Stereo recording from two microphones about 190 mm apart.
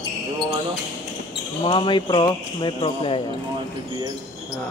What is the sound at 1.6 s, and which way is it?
Speech, 25° left (ahead or behind).